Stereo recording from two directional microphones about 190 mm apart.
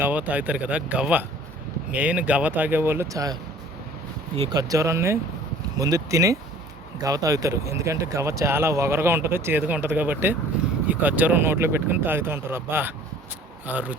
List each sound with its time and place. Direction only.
0.0 s speech: 10° right (ahead or behind)
4.5 s speech: 15° right (ahead or behind)